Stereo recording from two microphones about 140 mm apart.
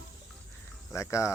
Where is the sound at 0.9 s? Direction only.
20° left (ahead or behind).